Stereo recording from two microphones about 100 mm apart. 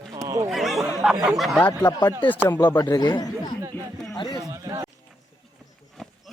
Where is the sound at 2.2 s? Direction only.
20° left (ahead or behind).